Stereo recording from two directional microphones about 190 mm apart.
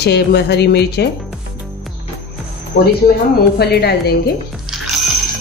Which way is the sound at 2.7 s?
55° left (ahead or behind).